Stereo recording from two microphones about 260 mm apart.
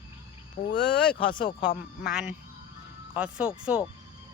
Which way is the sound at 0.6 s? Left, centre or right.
Left.